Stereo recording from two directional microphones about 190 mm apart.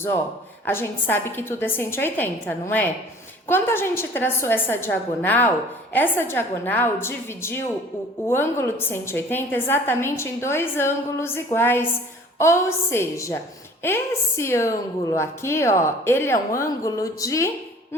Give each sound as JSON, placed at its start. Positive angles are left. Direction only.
{"t": 0.6, "sound": "a woman's voice", "side_deg": 10}